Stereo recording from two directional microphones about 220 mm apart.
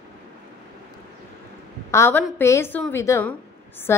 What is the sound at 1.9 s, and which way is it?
A woman's voice, 10° left (ahead or behind).